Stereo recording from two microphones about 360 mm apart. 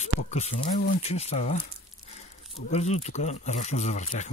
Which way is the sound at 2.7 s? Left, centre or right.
Centre.